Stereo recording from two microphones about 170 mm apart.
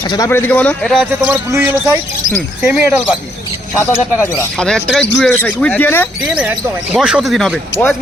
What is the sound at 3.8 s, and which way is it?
A man's voice, 15° left (ahead or behind).